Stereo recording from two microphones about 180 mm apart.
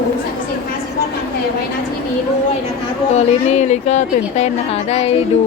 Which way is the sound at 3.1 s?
40° left (ahead or behind).